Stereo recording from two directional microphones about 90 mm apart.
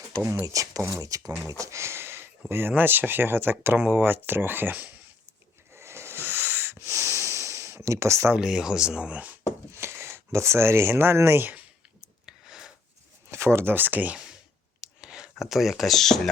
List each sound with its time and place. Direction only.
0.4 s speech: 40° right (ahead or behind); by 4.9 s 20° right (ahead or behind)
5.7 s wheeze: 30° right (ahead or behind)
7.9 s speech: 35° right (ahead or behind)
8.4 s speech: 10° right (ahead or behind)
9.7 s speech: 30° right (ahead or behind)
12.2 s a sound: 5° right (ahead or behind)
13.3 s speech: 30° right (ahead or behind)
14.8 s clicking: 10° right (ahead or behind)